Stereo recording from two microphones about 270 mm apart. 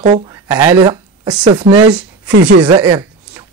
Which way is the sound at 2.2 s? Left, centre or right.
Right.